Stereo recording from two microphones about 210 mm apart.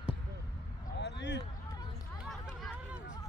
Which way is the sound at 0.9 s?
55° left (ahead or behind).